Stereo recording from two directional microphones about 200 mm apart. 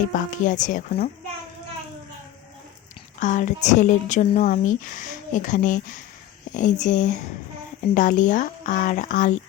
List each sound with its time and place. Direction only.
0.1 s speech: 40° left (ahead or behind)
3.2 s speech: 40° left (ahead or behind)